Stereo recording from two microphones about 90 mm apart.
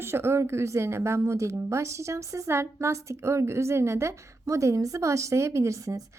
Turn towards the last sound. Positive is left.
turn(degrees=-40)  # may be behind; listen again after turning